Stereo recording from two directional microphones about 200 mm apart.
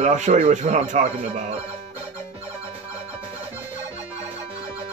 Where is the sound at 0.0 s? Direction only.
35° right (ahead or behind).